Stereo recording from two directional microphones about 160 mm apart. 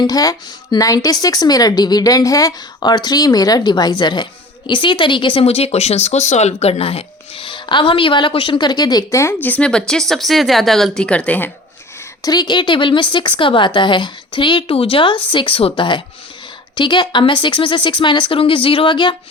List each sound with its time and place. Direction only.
0.0 s a woman's voice: 25° left (ahead or behind)
12.2 s a woman's voice: 25° left (ahead or behind)